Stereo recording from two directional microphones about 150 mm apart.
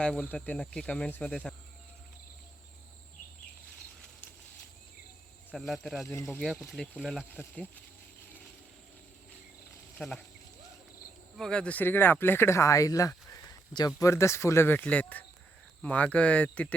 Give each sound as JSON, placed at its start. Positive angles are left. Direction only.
{"t": 0.0, "sound": "speech", "side_deg": 5}
{"t": 5.5, "sound": "speech", "side_deg": 0}
{"t": 10.0, "sound": "speech", "side_deg": 5}
{"t": 11.3, "sound": "speech", "side_deg": 5}